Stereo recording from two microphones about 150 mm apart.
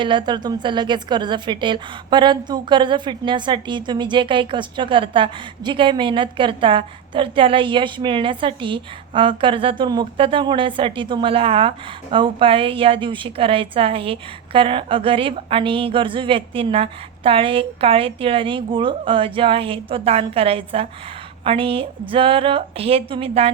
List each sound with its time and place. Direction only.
0.0 s a woman's voice: 30° right (ahead or behind)